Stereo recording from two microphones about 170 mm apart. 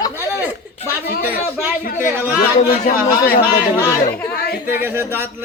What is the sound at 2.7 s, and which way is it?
Speech, 55° left (ahead or behind).